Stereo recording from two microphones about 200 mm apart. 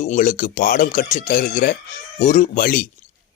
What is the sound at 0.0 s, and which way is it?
Speech, 40° left (ahead or behind).